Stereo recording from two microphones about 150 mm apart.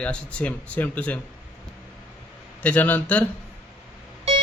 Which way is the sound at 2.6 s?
10° left (ahead or behind).